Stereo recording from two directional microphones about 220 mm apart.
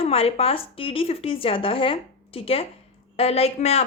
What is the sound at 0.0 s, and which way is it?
A woman's voice, 25° left (ahead or behind).